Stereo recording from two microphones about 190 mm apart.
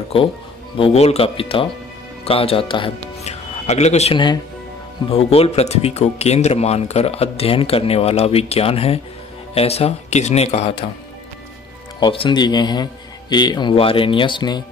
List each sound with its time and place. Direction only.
0.7 s speech: 30° left (ahead or behind)
12.0 s speech: 25° left (ahead or behind)